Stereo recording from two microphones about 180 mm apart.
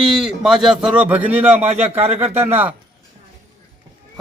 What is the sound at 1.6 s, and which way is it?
Speech, 35° right (ahead or behind).